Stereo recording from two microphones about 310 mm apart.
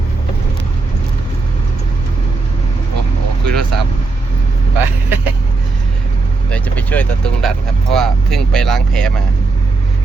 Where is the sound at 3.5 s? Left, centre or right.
Right.